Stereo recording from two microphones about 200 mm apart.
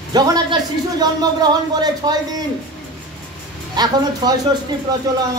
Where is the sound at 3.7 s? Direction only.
20° right (ahead or behind).